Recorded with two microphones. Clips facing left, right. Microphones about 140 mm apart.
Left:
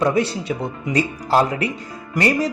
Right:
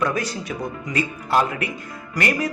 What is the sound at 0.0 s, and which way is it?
A man's voice, 30° left (ahead or behind).